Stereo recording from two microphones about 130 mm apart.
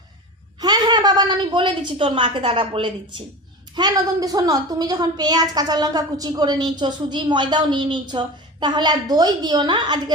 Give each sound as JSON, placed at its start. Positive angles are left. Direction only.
{"t": 0.6, "sound": "a woman's voice", "side_deg": -30}
{"t": 3.8, "sound": "a woman's voice", "side_deg": -30}